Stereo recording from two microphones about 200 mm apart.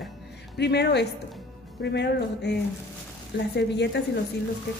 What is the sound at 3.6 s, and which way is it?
Speech, 60° left (ahead or behind).